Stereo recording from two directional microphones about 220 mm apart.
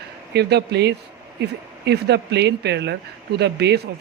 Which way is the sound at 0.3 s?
50° right (ahead or behind).